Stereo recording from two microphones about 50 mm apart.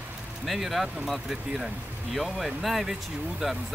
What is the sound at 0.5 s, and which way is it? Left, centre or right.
Speech, centre.